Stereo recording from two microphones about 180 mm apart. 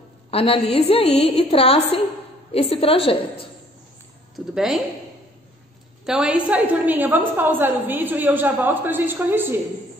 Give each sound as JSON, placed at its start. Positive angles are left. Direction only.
{"t": 0.3, "sound": "a woman's voice", "side_deg": 35}
{"t": 4.6, "sound": "speech", "side_deg": 0}
{"t": 6.0, "sound": "a woman's voice", "side_deg": -5}